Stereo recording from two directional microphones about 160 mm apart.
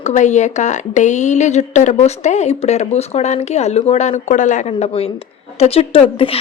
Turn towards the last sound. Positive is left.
turn(degrees=35)  # may be behind; listen again after turning